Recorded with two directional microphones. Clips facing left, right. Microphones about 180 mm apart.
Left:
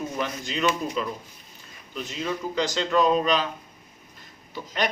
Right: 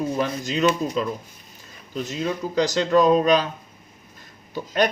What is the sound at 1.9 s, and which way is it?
Speech, 40° right (ahead or behind).